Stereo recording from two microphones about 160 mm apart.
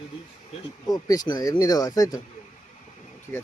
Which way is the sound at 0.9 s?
25° left (ahead or behind).